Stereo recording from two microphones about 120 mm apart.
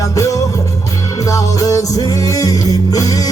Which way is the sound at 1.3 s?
30° left (ahead or behind).